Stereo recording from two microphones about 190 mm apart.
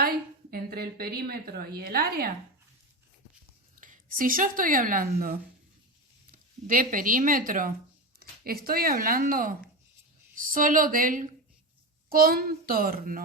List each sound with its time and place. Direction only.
0.5 s a woman's voice: 55° right (ahead or behind)
3.8 s a woman's voice: 45° right (ahead or behind)
6.7 s a woman's voice: 45° right (ahead or behind)